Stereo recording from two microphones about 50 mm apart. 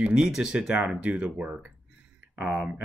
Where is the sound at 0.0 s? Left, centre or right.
Centre.